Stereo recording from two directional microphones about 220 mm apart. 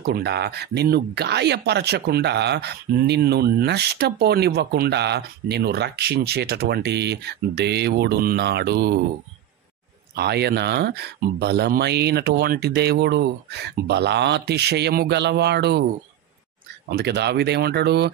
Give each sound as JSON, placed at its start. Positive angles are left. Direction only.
{"t": 0.0, "sound": "speech", "side_deg": -45}
{"t": 10.1, "sound": "speech", "side_deg": -50}
{"t": 16.9, "sound": "speech", "side_deg": -50}